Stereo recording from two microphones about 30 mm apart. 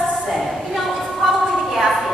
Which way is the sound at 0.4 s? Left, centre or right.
Centre.